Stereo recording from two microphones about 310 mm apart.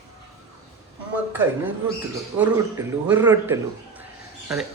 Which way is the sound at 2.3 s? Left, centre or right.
Centre.